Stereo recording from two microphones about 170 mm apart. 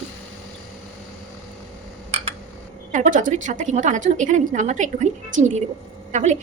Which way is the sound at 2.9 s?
45° right (ahead or behind).